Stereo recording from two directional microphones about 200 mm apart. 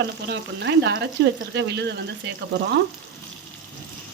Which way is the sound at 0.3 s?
60° right (ahead or behind).